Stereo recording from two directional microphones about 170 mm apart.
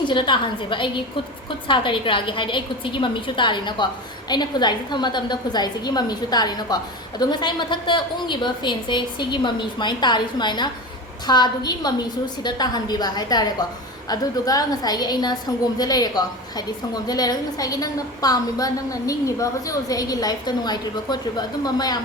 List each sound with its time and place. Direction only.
0.0 s a woman's voice: 30° left (ahead or behind)